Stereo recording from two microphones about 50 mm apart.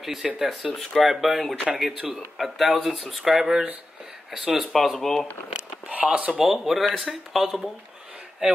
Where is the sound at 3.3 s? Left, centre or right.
Centre.